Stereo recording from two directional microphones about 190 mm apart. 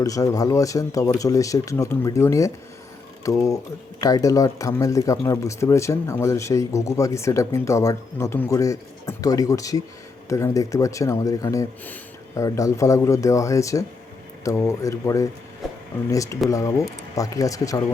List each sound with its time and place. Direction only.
0.0 s speech: 20° left (ahead or behind)